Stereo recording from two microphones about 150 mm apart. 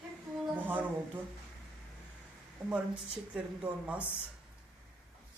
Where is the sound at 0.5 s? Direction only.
10° right (ahead or behind).